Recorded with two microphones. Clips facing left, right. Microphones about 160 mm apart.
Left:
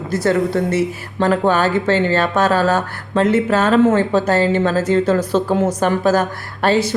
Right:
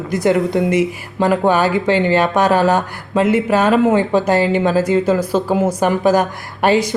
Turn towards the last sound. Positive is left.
turn(degrees=-15)  # may be behind; listen again after turning